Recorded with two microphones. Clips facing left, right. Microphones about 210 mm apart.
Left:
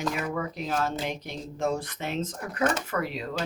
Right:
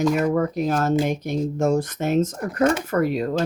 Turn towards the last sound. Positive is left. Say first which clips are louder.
# right 9 dB
turn(degrees=-45)  # may be behind; listen again after turning